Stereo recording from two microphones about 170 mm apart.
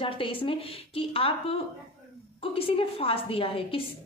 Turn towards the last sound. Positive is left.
turn(degrees=35)  # may be behind; listen again after turning